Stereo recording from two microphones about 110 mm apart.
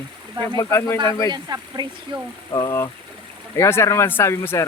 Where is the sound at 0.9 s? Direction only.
45° right (ahead or behind).